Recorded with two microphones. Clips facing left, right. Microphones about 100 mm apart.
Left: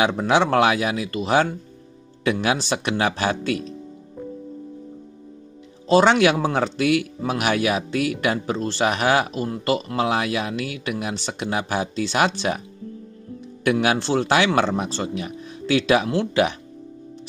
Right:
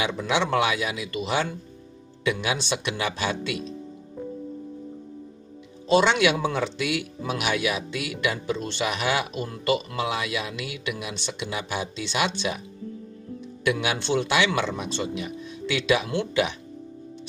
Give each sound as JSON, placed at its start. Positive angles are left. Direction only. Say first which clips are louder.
{"t": 0.0, "sound": "speech", "louder": "left 6 dB", "side_deg": 50}
{"t": 5.9, "sound": "speech", "louder": "left 4 dB", "side_deg": 40}
{"t": 10.1, "sound": "speech", "louder": "left 6 dB", "side_deg": 45}
{"t": 13.7, "sound": "speech", "louder": "left 5 dB", "side_deg": 40}